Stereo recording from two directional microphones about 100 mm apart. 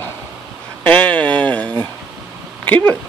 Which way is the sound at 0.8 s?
15° left (ahead or behind).